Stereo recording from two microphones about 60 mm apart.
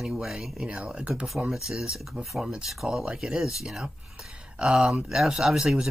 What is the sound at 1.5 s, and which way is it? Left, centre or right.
Speech, centre.